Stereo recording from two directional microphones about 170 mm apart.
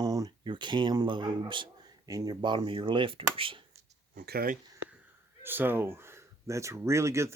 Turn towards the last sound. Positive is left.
turn(degrees=-15)  # may be behind; listen again after turning